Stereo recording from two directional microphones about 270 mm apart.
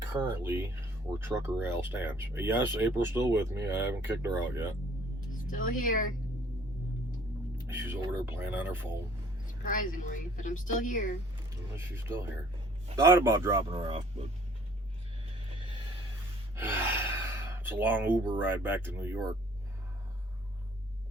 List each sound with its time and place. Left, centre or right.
0.1 s speech: centre
5.3 s speech: left
7.7 s speech: centre
9.6 s a woman's voice: left
11.7 s speech: centre
15.5 s a sound: centre
16.6 s gasp: centre
17.7 s speech: centre